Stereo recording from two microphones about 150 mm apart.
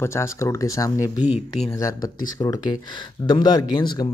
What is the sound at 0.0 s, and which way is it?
Speech, 20° left (ahead or behind).